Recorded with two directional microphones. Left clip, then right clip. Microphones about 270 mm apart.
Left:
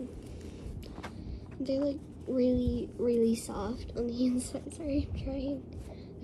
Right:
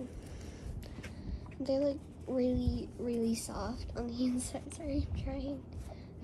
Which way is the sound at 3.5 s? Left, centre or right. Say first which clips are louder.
Left 3 dB; centre.